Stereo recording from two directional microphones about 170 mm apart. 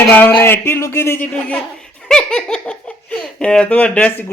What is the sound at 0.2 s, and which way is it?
Speech, 10° left (ahead or behind).